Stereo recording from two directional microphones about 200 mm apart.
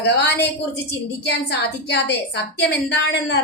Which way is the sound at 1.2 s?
60° left (ahead or behind).